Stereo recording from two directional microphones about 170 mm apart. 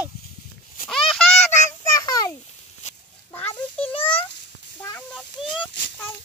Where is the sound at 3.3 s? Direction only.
10° left (ahead or behind).